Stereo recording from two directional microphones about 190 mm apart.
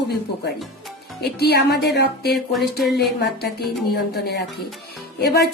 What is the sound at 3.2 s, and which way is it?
Speech, 55° left (ahead or behind).